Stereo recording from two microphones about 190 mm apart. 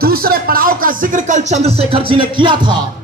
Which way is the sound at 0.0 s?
50° right (ahead or behind).